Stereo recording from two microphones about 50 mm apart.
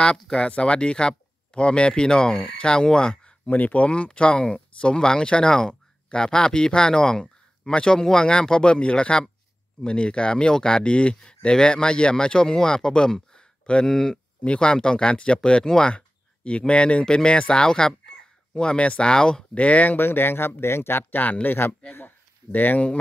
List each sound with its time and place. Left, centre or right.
0.0 s speech: centre
3.4 s speech: left; by 19.4 s centre
19.5 s speech: left
20.0 s speech: left
21.2 s speech: left